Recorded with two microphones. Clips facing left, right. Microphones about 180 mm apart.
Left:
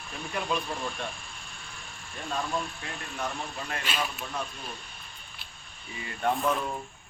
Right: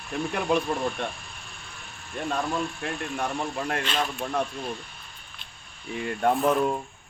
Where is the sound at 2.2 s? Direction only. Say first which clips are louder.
Right 4 dB; 55° right (ahead or behind).